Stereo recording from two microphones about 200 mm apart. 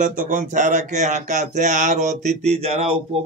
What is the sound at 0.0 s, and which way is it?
Speech, 40° right (ahead or behind).